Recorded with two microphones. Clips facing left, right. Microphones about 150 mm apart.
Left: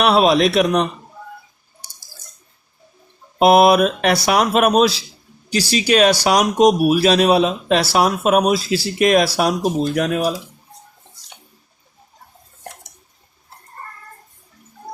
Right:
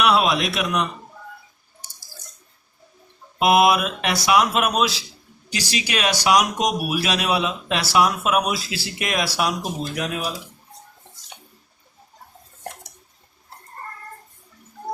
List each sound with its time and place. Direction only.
0.0 s speech: 35° left (ahead or behind)
3.3 s speech: 35° left (ahead or behind)
5.5 s speech: 35° left (ahead or behind)